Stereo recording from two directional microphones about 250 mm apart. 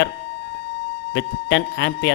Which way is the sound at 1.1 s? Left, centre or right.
Left.